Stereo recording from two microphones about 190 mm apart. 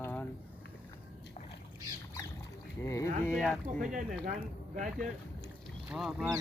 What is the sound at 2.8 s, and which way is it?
Boat, 15° left (ahead or behind).